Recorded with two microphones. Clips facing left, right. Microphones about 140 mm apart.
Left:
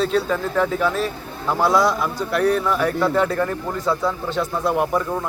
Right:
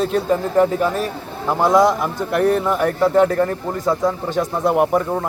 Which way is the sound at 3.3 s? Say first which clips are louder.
Right 3 dB; 35° right (ahead or behind).